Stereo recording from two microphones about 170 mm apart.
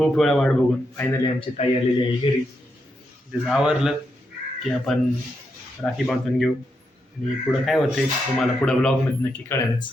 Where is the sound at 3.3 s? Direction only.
Centre (ahead or behind).